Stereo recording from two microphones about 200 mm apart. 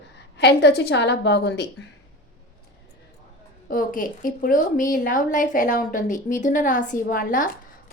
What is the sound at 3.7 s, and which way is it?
A woman's voice, 45° left (ahead or behind).